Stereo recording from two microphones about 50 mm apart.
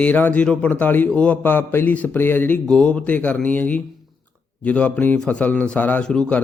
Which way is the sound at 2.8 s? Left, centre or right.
Left.